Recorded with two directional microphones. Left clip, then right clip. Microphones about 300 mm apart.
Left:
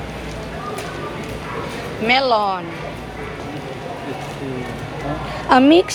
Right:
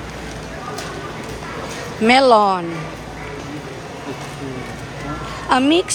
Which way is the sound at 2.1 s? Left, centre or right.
Centre.